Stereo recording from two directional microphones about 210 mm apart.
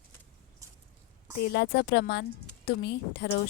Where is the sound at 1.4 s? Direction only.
50° left (ahead or behind).